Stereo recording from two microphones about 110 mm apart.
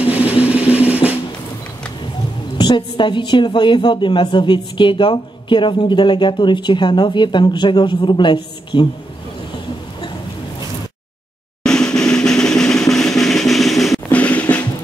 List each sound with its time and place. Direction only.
0.0 s drum: 15° right (ahead or behind)
2.5 s a woman's voice: 45° left (ahead or behind)
11.6 s drum: 5° left (ahead or behind)
14.1 s drum: 15° left (ahead or behind)